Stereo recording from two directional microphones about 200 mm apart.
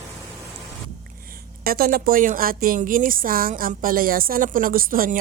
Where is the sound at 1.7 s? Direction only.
45° right (ahead or behind).